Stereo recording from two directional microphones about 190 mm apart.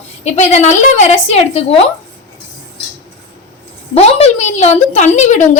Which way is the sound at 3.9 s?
35° left (ahead or behind).